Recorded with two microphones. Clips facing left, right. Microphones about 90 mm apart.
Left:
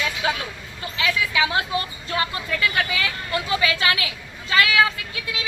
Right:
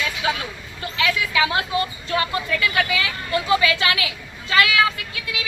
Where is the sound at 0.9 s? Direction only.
25° left (ahead or behind).